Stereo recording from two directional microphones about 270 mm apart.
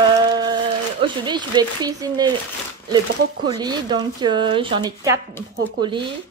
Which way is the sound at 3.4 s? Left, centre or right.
Centre.